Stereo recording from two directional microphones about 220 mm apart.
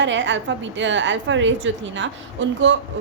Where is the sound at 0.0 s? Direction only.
55° right (ahead or behind).